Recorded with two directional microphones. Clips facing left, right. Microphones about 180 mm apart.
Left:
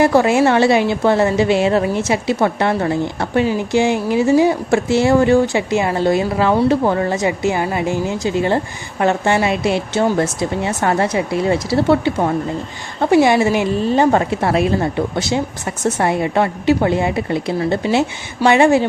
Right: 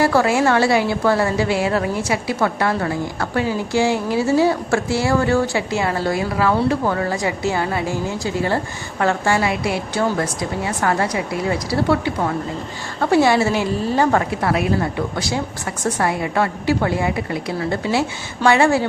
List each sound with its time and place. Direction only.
0.0 s a woman's voice: 20° left (ahead or behind)